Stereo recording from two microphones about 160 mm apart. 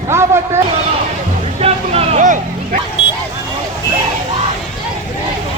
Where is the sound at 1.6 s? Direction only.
40° right (ahead or behind).